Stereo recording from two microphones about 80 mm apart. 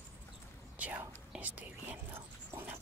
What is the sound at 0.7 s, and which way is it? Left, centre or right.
Whispering, centre.